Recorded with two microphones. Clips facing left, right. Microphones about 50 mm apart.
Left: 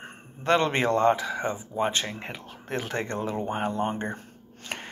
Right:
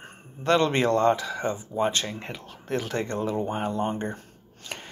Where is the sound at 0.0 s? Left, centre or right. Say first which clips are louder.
Right 1 dB; left.